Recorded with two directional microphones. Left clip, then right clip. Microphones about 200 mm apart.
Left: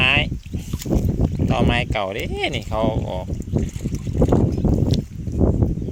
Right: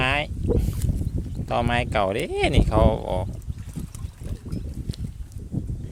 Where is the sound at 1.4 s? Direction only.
15° right (ahead or behind).